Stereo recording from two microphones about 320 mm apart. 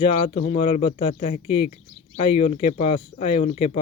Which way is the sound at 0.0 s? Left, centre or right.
Centre.